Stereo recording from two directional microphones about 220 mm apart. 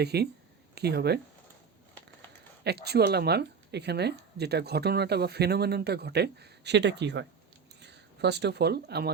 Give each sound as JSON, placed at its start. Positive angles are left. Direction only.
{"t": 0.0, "sound": "a woman's voice", "side_deg": -45}
{"t": 2.6, "sound": "a woman's voice", "side_deg": -45}